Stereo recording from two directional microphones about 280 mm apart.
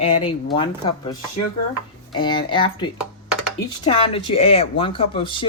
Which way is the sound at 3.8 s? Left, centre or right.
Centre.